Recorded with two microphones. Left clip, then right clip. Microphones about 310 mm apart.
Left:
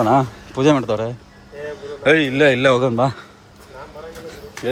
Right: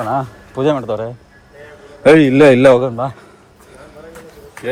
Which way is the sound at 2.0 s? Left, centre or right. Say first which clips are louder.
Right 6 dB; centre.